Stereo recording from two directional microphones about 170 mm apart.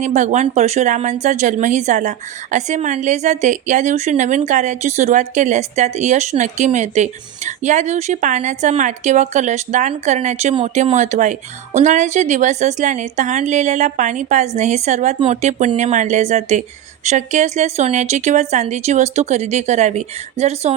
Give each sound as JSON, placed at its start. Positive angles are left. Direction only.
{"t": 0.0, "sound": "speech", "side_deg": -45}